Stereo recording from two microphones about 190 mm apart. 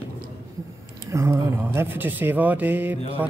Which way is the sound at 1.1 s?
15° right (ahead or behind).